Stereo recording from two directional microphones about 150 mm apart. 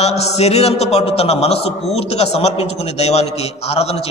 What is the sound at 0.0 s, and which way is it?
A man's voice, 45° left (ahead or behind).